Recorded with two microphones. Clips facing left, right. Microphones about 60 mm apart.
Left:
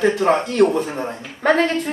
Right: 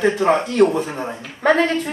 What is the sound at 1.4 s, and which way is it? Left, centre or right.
Speech, right.